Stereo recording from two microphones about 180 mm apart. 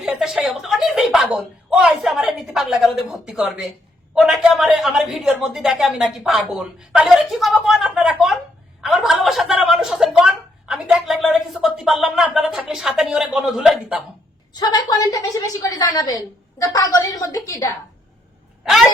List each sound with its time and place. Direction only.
0.0 s a woman's voice: centre (ahead or behind)
14.5 s a woman's voice: 20° left (ahead or behind)
18.6 s speech: centre (ahead or behind)